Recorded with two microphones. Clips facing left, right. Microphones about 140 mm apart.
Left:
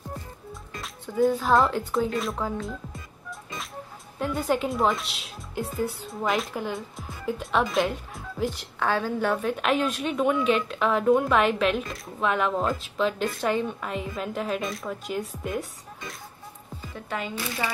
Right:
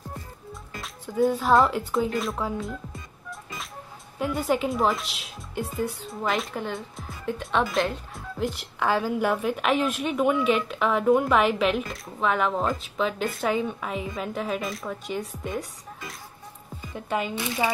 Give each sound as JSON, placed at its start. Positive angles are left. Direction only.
{"t": 0.7, "sound": "speech", "side_deg": 0}
{"t": 16.9, "sound": "speech", "side_deg": -20}